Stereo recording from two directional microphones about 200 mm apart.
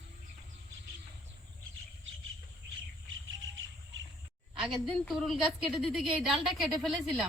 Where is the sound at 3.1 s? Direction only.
70° right (ahead or behind).